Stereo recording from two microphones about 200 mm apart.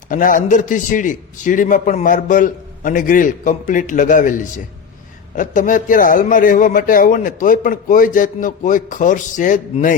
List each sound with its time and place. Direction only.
0.1 s a man's voice: 40° left (ahead or behind)